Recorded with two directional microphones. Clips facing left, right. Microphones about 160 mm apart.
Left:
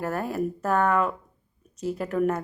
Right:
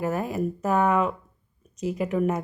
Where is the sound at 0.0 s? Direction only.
5° right (ahead or behind).